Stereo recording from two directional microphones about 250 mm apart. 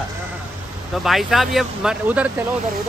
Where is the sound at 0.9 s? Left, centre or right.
Centre.